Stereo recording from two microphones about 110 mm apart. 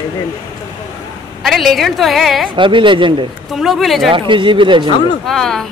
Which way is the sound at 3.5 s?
Centre (ahead or behind).